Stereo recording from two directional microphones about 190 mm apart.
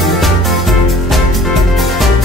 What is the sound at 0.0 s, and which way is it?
Music, centre (ahead or behind).